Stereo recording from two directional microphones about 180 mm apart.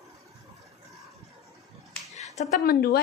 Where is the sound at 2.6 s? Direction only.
60° left (ahead or behind).